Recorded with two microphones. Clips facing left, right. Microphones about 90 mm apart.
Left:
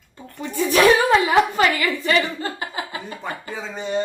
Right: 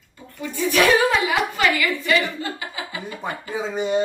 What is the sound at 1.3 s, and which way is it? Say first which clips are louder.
A woman's voice: left 4 dB; 40° left (ahead or behind).